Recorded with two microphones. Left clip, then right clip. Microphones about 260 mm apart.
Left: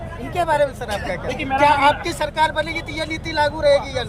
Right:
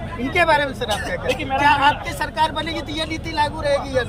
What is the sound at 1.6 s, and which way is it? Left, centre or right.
Speech, left.